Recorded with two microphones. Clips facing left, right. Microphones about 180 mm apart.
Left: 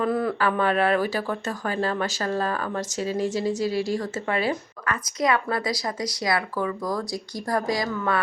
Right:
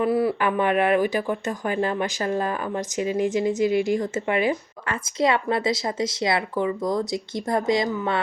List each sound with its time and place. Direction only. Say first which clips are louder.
0.0 s speech: right 2 dB; 10° right (ahead or behind)